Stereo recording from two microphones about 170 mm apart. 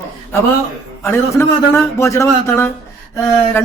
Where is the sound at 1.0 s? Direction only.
15° left (ahead or behind).